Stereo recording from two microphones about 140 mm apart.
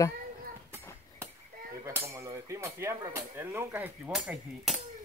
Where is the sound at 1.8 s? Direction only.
20° right (ahead or behind).